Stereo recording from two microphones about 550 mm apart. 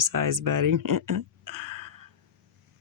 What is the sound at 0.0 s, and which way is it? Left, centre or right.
Speech, right.